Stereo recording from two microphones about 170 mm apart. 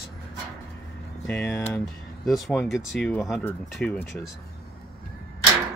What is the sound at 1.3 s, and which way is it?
Speech, 10° left (ahead or behind).